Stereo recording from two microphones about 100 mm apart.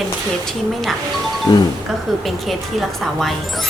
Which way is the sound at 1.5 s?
50° left (ahead or behind).